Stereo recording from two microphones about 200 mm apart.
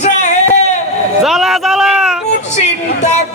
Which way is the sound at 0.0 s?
35° left (ahead or behind).